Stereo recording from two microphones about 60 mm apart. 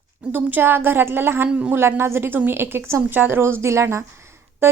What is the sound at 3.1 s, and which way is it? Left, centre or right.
Speech, right.